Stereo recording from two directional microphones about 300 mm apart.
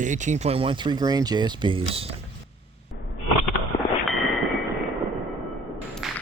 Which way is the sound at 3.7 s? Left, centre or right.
Centre.